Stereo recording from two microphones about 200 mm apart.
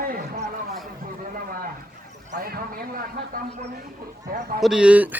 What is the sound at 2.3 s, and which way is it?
A man's voice, 45° right (ahead or behind).